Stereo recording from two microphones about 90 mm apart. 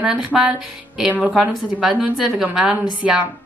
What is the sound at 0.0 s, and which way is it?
Speech, 10° right (ahead or behind).